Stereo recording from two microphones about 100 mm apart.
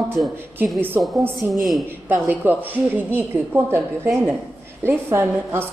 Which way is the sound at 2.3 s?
20° right (ahead or behind).